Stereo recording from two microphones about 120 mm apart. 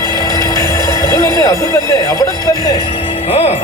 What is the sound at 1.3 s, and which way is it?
Music, 30° left (ahead or behind).